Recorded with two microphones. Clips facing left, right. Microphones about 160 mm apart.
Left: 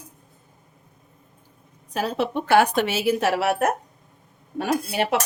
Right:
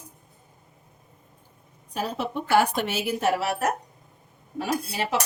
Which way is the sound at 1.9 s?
85° left.